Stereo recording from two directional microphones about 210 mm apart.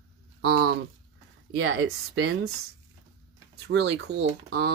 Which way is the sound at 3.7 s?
55° right (ahead or behind).